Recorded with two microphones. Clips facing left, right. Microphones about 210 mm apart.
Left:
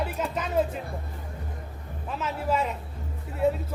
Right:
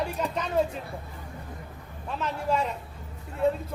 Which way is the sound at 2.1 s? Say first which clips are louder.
Even; 5° left (ahead or behind).